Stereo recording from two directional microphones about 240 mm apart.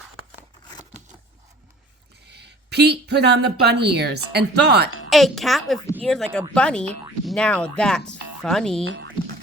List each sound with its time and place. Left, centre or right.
2.2 s speech: right
5.0 s speech: centre
8.8 s speech: right